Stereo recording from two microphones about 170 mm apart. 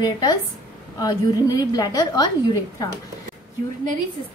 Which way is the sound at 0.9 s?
25° left (ahead or behind).